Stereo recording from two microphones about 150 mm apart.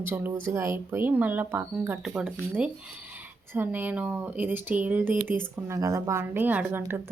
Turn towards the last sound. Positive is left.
turn(degrees=-15)  # may be behind; listen again after turning